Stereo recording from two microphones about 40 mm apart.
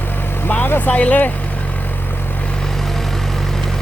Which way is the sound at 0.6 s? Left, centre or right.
Left.